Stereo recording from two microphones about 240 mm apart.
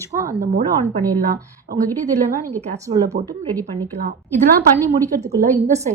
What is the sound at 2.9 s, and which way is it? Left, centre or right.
Speech, centre.